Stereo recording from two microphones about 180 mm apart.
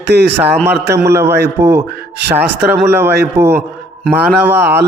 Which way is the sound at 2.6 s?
65° right (ahead or behind).